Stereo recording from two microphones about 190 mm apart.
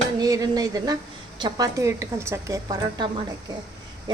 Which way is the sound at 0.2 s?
20° right (ahead or behind).